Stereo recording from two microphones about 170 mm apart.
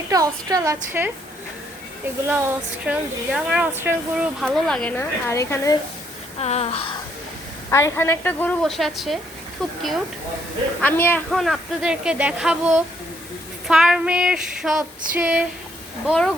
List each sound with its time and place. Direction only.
0.1 s a woman's voice: 20° right (ahead or behind)
2.2 s speech: 10° right (ahead or behind); by 5.7 s 15° left (ahead or behind)
6.4 s a sound: 40° left (ahead or behind)
7.7 s a woman's voice: 15° left (ahead or behind)
10.8 s a woman's voice: 10° left (ahead or behind)
11.3 s speech: centre (ahead or behind)
14.8 s female singing: 10° right (ahead or behind)